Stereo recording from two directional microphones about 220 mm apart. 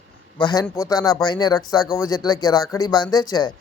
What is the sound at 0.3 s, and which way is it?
A man's voice, 20° left (ahead or behind).